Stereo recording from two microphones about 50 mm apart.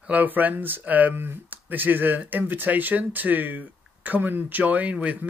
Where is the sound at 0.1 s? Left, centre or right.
Right.